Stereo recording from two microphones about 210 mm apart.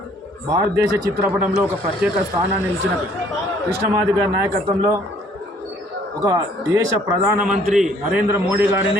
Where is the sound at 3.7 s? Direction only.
15° right (ahead or behind).